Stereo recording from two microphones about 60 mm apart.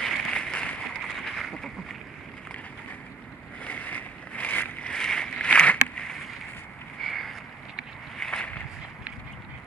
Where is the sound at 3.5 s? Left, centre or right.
Left.